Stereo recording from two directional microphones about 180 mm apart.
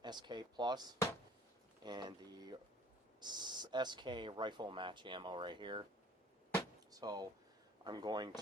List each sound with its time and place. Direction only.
0.0 s speech: 25° right (ahead or behind)
6.9 s speech: 20° right (ahead or behind)